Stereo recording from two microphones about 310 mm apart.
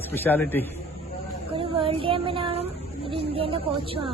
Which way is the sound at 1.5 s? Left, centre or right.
Centre.